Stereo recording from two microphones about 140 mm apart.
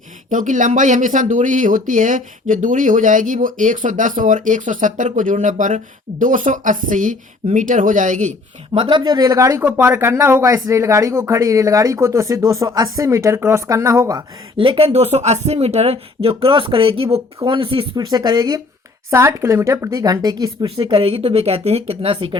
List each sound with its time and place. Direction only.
0.3 s speech: 65° right (ahead or behind)
8.7 s speech: 40° right (ahead or behind)
14.5 s speech: 40° right (ahead or behind)
19.1 s speech: 15° right (ahead or behind); by 22.4 s 35° right (ahead or behind)